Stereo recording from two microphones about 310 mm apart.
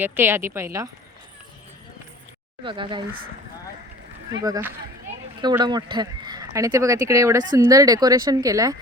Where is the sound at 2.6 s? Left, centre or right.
Centre.